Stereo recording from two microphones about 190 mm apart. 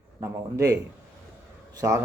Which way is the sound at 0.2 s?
15° right (ahead or behind).